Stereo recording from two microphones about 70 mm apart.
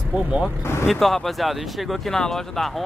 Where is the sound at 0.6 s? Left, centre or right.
Left.